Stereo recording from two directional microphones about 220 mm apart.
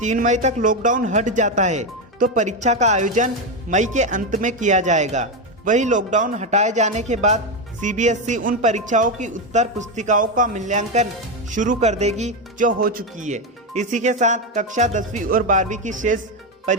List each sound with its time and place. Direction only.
0.0 s speech: 35° right (ahead or behind)